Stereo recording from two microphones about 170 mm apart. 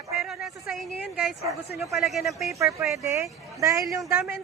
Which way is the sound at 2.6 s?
20° right (ahead or behind).